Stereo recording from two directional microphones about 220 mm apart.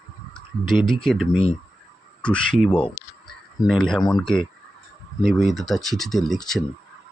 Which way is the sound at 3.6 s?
Centre (ahead or behind).